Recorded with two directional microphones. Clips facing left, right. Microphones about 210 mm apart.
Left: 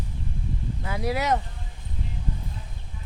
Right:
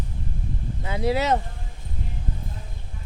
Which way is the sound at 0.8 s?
25° right (ahead or behind).